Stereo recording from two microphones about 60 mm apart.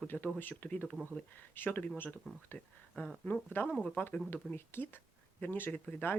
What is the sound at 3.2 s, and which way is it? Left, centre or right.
Speech, left.